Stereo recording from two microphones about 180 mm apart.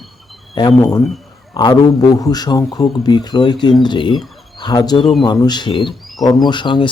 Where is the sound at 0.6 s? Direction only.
25° left (ahead or behind).